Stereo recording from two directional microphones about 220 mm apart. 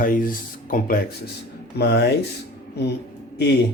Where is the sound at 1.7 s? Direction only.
50° left (ahead or behind).